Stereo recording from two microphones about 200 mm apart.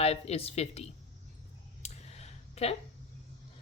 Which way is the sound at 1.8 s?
30° left (ahead or behind).